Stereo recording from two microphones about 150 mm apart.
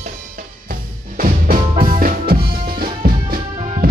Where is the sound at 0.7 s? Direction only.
65° right (ahead or behind).